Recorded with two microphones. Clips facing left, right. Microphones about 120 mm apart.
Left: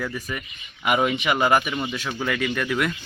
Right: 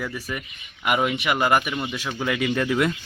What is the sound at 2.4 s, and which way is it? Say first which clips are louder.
Speech: right 5 dB; 20° right (ahead or behind).